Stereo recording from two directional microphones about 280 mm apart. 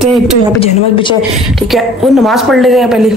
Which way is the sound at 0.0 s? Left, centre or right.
Centre.